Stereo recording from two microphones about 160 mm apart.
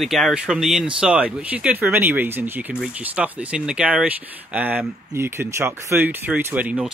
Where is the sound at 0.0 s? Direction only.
Centre (ahead or behind).